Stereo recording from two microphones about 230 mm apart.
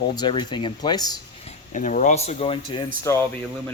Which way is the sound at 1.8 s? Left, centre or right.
Left.